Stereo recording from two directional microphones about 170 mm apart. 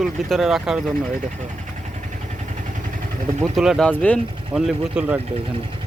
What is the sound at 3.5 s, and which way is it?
Speech, centre (ahead or behind).